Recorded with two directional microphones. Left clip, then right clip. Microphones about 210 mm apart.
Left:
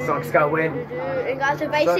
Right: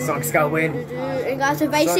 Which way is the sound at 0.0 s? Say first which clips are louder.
Left 1 dB; centre (ahead or behind).